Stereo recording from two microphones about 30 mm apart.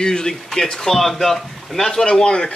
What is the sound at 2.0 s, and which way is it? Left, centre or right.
Speech, left.